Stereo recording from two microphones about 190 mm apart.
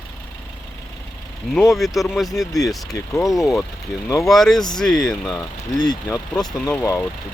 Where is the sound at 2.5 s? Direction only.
20° left (ahead or behind).